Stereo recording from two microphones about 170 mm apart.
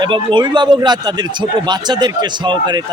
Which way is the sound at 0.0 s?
30° right (ahead or behind).